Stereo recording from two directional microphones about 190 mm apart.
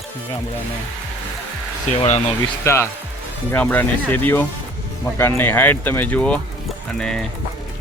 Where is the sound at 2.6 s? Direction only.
15° left (ahead or behind).